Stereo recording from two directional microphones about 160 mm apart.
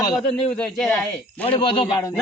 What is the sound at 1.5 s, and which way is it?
Speech, 30° left (ahead or behind).